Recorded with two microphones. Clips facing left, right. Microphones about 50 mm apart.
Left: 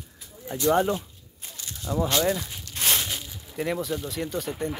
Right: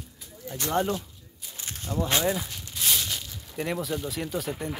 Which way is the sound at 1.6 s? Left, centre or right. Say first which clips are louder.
Right 1 dB; right.